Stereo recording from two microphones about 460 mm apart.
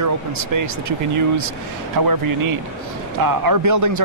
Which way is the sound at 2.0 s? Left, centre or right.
Right.